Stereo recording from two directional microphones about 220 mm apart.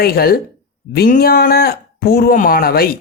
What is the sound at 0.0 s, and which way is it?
Speech, 45° left (ahead or behind).